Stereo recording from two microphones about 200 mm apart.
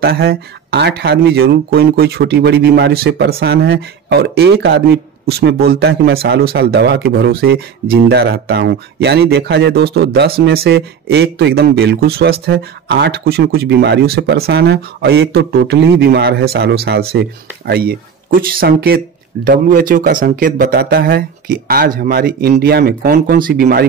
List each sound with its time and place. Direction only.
0.0 s speech: 55° right (ahead or behind)